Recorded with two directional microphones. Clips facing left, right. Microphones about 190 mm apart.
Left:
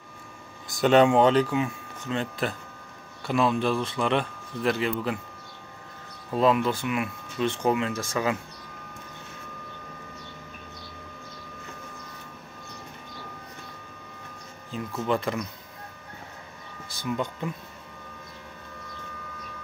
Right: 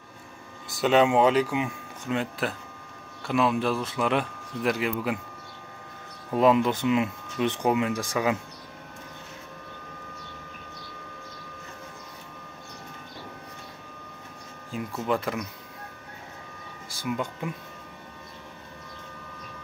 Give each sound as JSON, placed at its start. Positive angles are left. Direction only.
{"t": 0.7, "sound": "speech", "side_deg": -5}
{"t": 6.3, "sound": "speech", "side_deg": -15}
{"t": 14.7, "sound": "speech", "side_deg": -5}
{"t": 16.9, "sound": "speech", "side_deg": -10}